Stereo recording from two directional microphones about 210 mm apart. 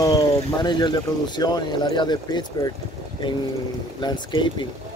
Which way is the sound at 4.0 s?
20° left (ahead or behind).